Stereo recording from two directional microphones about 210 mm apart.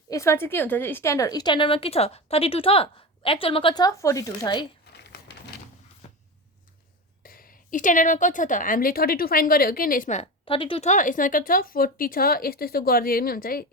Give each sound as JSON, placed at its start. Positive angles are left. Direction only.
{"t": 0.1, "sound": "a woman's voice", "side_deg": 15}
{"t": 6.0, "sound": "cupboard open or close", "side_deg": 30}
{"t": 7.2, "sound": "a woman's voice", "side_deg": 45}